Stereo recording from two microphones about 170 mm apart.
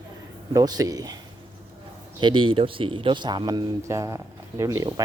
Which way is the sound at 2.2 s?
30° right (ahead or behind).